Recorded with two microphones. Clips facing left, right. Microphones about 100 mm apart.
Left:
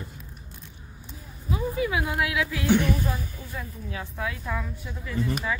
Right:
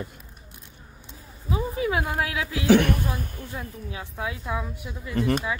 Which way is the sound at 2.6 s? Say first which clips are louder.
Right 5 dB; 80° right.